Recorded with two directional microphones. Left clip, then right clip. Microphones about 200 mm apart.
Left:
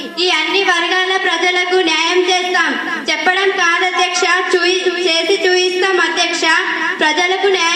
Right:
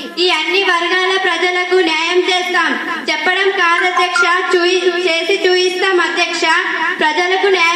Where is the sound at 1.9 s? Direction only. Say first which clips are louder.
Left 1 dB; 50° right (ahead or behind).